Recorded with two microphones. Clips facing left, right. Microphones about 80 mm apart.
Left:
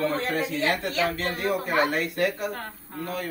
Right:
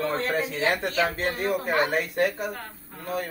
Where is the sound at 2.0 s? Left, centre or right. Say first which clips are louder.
Right 1 dB; centre.